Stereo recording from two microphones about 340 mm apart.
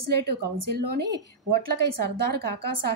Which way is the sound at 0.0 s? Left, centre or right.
Right.